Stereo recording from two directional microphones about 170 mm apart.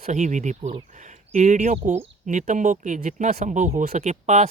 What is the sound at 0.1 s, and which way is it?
Speech, 45° right (ahead or behind).